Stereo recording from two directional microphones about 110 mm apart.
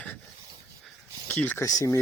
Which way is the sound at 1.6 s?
30° left (ahead or behind).